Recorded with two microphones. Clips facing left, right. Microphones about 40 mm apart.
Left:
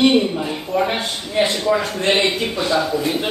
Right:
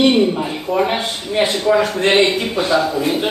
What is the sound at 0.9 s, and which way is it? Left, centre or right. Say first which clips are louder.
A man's voice: right 2 dB; right.